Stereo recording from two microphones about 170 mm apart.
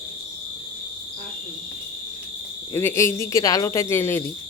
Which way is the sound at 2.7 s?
15° left (ahead or behind).